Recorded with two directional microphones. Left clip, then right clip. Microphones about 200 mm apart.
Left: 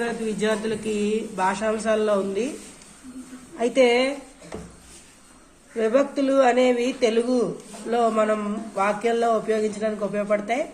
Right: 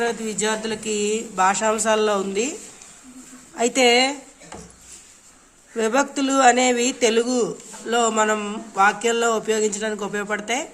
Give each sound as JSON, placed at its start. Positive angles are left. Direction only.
{"t": 0.0, "sound": "speech", "side_deg": -45}
{"t": 3.6, "sound": "speech", "side_deg": -55}
{"t": 5.7, "sound": "speech", "side_deg": -55}